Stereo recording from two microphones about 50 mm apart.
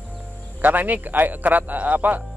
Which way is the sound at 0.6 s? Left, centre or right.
Right.